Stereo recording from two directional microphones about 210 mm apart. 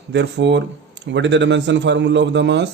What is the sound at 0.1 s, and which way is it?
A man's voice, 55° right (ahead or behind).